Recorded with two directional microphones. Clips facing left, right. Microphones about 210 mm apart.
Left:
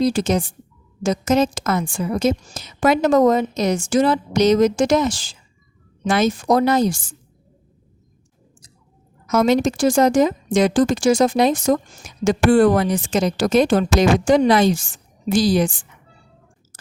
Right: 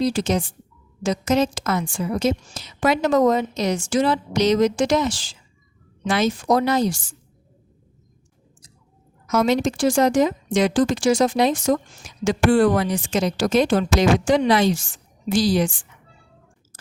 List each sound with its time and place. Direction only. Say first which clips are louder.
0.0 s a woman's voice: left 3 dB; 45° left (ahead or behind)
9.3 s a woman's voice: left 3 dB; 45° left (ahead or behind)